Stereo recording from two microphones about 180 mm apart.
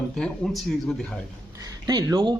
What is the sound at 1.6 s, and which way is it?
Speech, 20° right (ahead or behind).